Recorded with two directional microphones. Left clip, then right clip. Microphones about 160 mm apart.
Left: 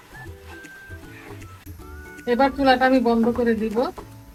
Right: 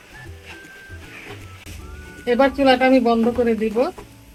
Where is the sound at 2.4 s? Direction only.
45° right (ahead or behind).